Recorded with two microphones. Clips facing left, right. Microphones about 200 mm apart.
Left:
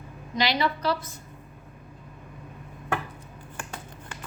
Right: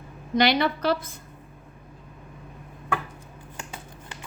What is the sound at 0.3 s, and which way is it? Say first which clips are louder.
Speech: right 4 dB; 55° right (ahead or behind).